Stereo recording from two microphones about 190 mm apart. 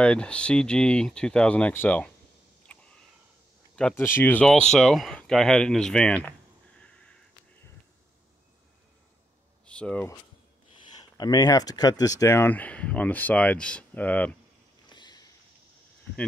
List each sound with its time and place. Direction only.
0.0 s speech: 5° left (ahead or behind)
2.7 s a sound: 5° left (ahead or behind)
3.7 s speech: 10° left (ahead or behind)
6.8 s a sound: 5° left (ahead or behind)
9.7 s speech: 5° left (ahead or behind)
11.1 s speech: 20° left (ahead or behind)
14.9 s sniff: 20° left (ahead or behind)